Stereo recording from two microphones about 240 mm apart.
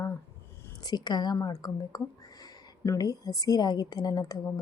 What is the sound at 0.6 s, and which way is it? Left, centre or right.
A woman's voice, centre.